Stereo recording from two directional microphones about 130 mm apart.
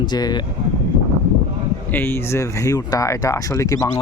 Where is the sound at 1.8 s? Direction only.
15° left (ahead or behind).